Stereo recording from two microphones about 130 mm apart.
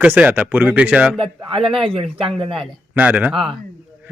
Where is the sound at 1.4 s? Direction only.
40° right (ahead or behind).